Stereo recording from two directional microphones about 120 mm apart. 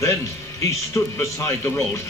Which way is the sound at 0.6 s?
25° left (ahead or behind).